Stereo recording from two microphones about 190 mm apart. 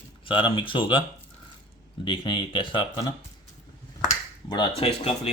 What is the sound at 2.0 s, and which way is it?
Speech, 25° left (ahead or behind).